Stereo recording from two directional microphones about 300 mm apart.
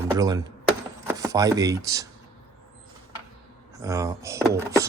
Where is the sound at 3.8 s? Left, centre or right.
Centre.